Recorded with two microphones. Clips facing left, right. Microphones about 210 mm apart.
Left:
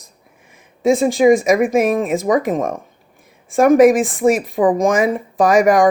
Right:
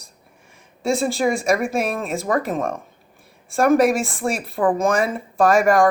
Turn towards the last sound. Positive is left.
turn(degrees=15)  # may be behind; listen again after turning